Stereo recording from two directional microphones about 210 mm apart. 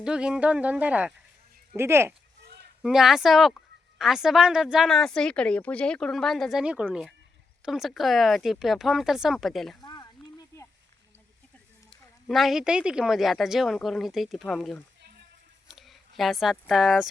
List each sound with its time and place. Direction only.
0.0 s a woman's voice: 5° right (ahead or behind)
2.8 s a woman's voice: centre (ahead or behind)
9.8 s a sound: 15° left (ahead or behind)
11.9 s a woman's voice: centre (ahead or behind)